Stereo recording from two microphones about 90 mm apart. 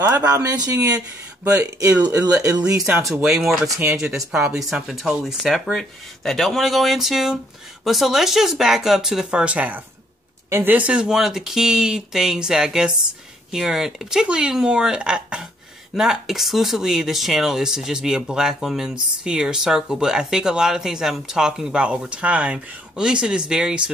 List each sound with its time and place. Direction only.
0.0 s speech: 20° right (ahead or behind)
0.6 s speech: 35° right (ahead or behind)
1.4 s speech: 20° right (ahead or behind)
2.3 s speech: 35° right (ahead or behind)
3.1 s speech: 5° right (ahead or behind)